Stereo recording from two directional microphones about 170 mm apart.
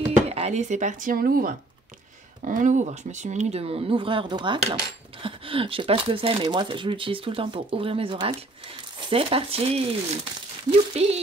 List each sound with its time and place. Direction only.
0.3 s speech: 40° right (ahead or behind)